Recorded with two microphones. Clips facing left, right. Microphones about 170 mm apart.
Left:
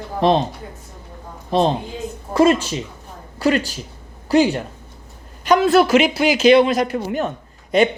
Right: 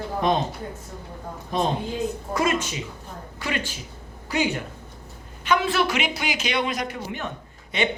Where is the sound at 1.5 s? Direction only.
30° left (ahead or behind).